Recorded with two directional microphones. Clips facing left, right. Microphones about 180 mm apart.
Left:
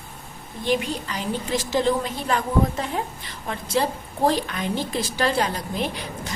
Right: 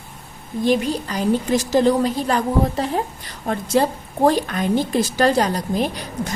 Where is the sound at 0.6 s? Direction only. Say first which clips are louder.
Right 5 dB; 40° right (ahead or behind).